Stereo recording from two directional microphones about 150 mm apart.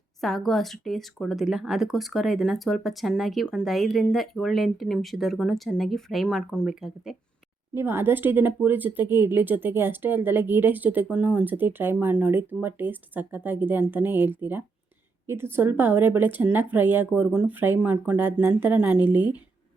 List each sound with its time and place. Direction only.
0.2 s speech: centre (ahead or behind)
7.7 s speech: 15° right (ahead or behind)